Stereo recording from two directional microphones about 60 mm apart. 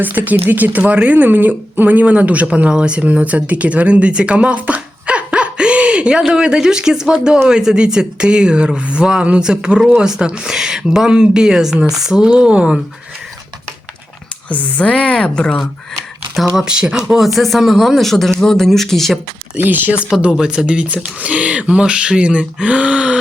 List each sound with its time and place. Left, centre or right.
0.0 s speech: right; by 12.7 s centre
14.5 s a woman's voice: left
16.6 s speech: centre
19.5 s speech: right
20.3 s speech: centre